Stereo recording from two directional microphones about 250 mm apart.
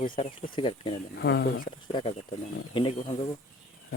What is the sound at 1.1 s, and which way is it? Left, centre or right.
Speech, left.